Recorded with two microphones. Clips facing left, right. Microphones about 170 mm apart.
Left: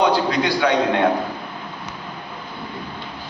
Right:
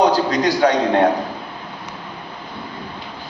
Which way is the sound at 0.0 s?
40° right (ahead or behind).